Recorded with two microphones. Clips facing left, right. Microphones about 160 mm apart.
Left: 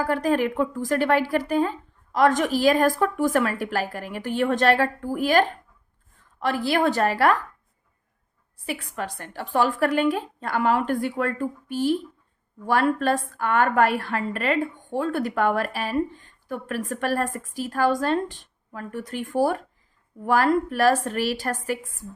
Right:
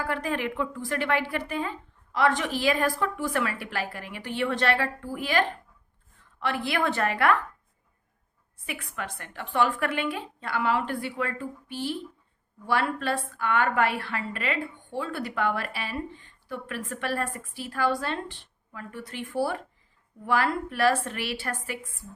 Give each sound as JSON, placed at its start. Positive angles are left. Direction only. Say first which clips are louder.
{"t": 0.0, "sound": "a woman's voice", "louder": "left 7 dB", "side_deg": 40}
{"t": 8.6, "sound": "a woman's voice", "louder": "left 5 dB", "side_deg": 35}